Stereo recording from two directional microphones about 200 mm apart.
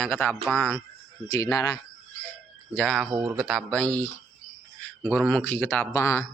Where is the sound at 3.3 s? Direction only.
Centre (ahead or behind).